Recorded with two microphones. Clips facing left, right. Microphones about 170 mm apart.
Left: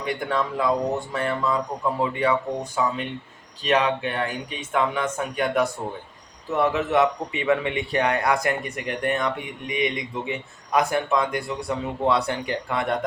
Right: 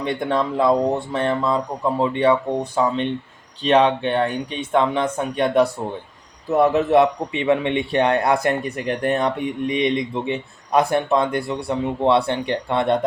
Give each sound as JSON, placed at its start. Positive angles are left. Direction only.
{"t": 0.0, "sound": "a man's voice", "side_deg": -30}